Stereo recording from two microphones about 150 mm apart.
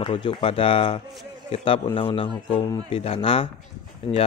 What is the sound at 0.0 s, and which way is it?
Speech, 35° left (ahead or behind).